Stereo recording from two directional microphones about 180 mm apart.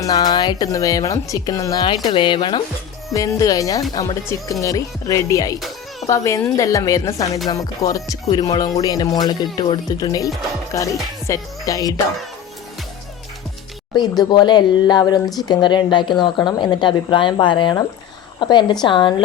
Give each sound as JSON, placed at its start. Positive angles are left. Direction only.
{"t": 0.0, "sound": "speech", "side_deg": 20}
{"t": 5.5, "sound": "music", "side_deg": 0}
{"t": 6.1, "sound": "speech", "side_deg": 15}
{"t": 10.7, "sound": "music", "side_deg": 15}
{"t": 11.3, "sound": "speech", "side_deg": 20}
{"t": 13.9, "sound": "speech", "side_deg": 20}